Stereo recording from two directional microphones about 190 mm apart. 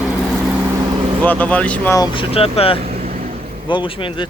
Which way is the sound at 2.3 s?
30° left (ahead or behind).